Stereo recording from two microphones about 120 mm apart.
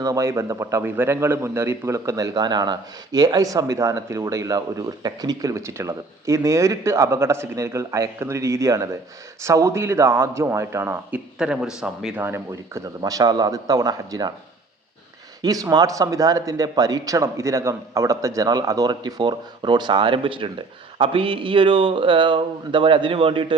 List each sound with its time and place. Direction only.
0.0 s a man's voice: 25° right (ahead or behind)
11.3 s a man's voice: 5° right (ahead or behind)
12.2 s a man's voice: 20° right (ahead or behind)
13.0 s speech: 30° right (ahead or behind)
15.4 s speech: 30° right (ahead or behind)